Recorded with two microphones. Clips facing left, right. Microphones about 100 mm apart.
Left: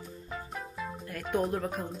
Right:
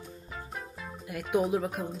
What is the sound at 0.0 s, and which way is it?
Music, centre (ahead or behind).